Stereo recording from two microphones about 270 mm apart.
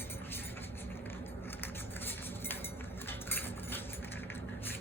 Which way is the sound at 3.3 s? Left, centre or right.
Centre.